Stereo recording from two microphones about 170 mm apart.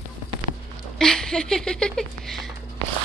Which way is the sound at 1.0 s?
5° left (ahead or behind).